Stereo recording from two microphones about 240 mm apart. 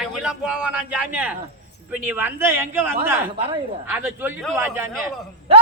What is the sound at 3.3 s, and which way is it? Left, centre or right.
Speech, right.